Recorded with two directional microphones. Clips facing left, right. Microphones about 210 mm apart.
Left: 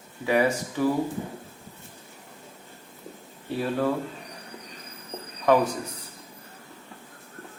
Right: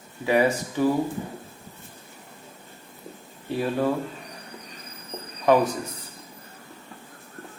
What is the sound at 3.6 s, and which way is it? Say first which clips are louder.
Speech: right 1 dB; 15° right (ahead or behind).